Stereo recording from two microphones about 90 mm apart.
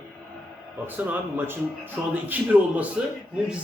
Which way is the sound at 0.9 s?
20° right (ahead or behind).